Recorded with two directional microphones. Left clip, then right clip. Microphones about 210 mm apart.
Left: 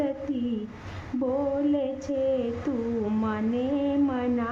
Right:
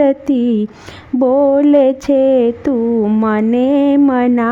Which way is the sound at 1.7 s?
50° right (ahead or behind).